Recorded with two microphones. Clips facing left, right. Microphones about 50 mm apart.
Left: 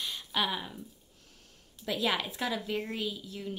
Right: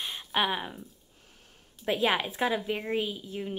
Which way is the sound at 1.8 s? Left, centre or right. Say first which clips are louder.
Right 4 dB; right.